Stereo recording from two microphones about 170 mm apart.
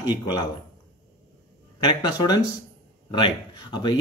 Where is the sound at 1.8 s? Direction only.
25° left (ahead or behind).